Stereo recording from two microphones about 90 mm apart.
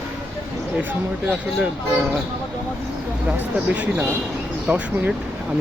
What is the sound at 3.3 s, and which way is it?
Speech, 15° right (ahead or behind).